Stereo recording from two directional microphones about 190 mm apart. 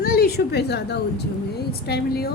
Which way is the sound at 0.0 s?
50° left (ahead or behind).